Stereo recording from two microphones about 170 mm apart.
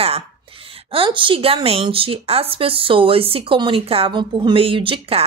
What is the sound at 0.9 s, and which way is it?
A woman's voice, 30° right (ahead or behind).